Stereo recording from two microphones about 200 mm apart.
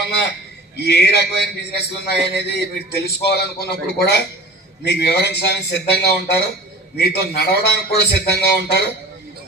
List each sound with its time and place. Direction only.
0.8 s a man's voice: 55° left (ahead or behind)